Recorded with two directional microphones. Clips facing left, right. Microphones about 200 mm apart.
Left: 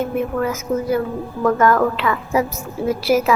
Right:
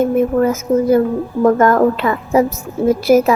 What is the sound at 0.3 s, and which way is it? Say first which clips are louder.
A woman's voice: right 7 dB; 45° right (ahead or behind).